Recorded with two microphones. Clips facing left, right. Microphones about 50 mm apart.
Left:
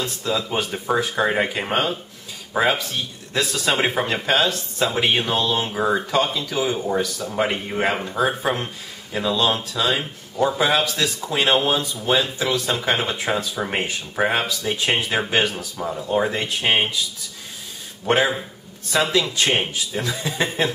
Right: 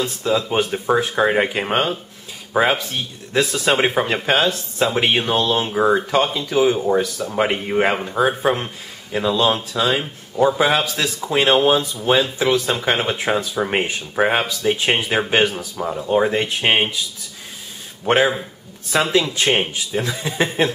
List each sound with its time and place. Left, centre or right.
0.2 s speech: right
0.7 s speech: centre
18.1 s speech: centre